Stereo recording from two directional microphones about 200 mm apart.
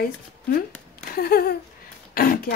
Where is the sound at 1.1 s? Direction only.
50° left (ahead or behind).